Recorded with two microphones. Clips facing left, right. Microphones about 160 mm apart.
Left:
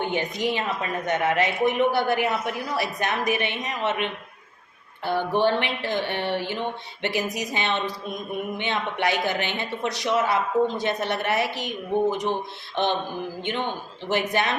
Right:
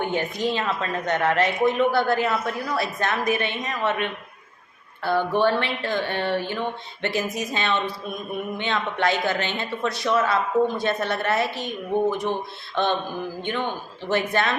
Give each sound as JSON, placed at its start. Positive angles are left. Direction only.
{"t": 0.0, "sound": "a woman's voice", "side_deg": 20}
{"t": 12.7, "sound": "a woman's voice", "side_deg": 20}